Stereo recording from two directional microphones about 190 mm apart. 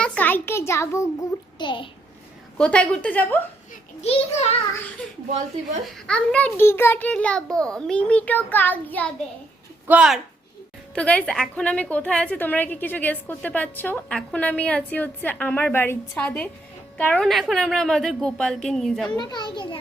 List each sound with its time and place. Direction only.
0.0 s a sound: 5° left (ahead or behind)
1.5 s a child's voice: 25° left (ahead or behind)
2.6 s a woman's voice: 5° left (ahead or behind)
4.0 s a child's voice: 35° left (ahead or behind)
5.8 s a woman's voice: 5° left (ahead or behind)
9.8 s speech: 5° right (ahead or behind)
10.9 s a woman's voice: 5° left (ahead or behind)
19.1 s a child's voice: 25° left (ahead or behind)